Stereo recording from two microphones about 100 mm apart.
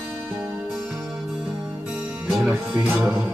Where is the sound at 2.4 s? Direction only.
20° right (ahead or behind).